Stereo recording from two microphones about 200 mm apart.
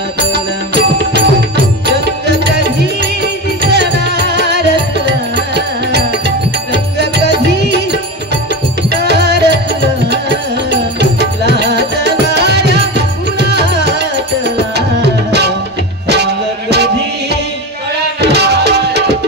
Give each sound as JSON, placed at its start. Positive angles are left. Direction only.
{"t": 0.3, "sound": "music", "side_deg": -55}
{"t": 3.7, "sound": "music", "side_deg": -55}